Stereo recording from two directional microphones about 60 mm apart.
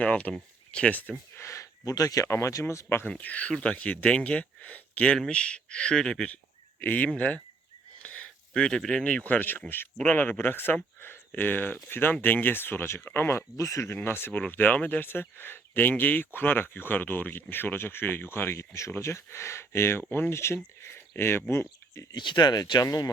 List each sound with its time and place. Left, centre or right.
0.0 s speech: left
1.4 s speech: left
1.8 s speech: left
2.2 s speech: left
3.1 s speech: left
6.3 s a sound: left
7.2 s speech: centre
8.0 s a sound: left
9.0 s speech: left
14.5 s speech: left
22.8 s speech: left